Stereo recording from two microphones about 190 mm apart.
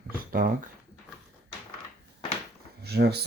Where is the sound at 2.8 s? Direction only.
55° right (ahead or behind).